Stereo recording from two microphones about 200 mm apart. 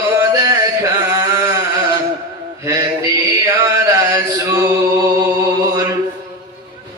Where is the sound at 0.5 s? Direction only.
15° right (ahead or behind).